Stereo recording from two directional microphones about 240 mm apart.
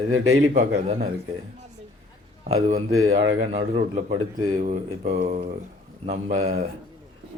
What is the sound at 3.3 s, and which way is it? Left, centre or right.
Speech, right.